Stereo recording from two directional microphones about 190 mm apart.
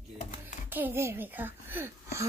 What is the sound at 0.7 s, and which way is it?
A child's voice, 10° right (ahead or behind).